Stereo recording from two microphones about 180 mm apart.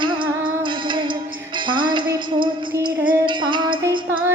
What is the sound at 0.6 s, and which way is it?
Music, 25° right (ahead or behind).